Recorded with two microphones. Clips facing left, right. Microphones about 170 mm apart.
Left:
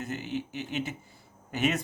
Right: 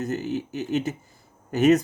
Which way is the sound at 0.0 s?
40° right (ahead or behind).